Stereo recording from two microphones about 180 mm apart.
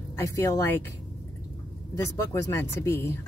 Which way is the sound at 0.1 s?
15° left (ahead or behind).